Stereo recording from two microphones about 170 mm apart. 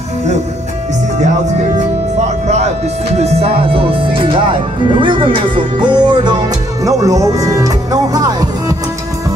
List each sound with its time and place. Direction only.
1.8 s music: 40° right (ahead or behind)
3.2 s speech: 35° right (ahead or behind); by 8.7 s 20° right (ahead or behind)